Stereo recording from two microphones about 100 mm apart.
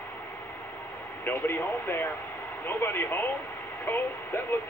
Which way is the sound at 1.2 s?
20° left (ahead or behind).